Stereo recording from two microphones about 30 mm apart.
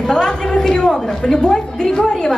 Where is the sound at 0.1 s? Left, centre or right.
Left.